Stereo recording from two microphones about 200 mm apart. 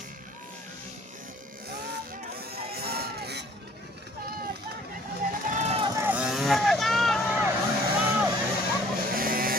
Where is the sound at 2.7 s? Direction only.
50° right (ahead or behind).